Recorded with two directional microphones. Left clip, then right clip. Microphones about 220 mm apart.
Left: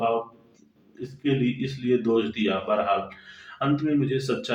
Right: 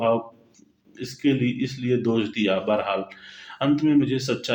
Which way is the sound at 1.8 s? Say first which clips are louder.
Left 1 dB; 35° right (ahead or behind).